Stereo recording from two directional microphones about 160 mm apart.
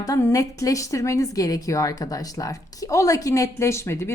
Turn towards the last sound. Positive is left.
turn(degrees=15)  # may be behind; listen again after turning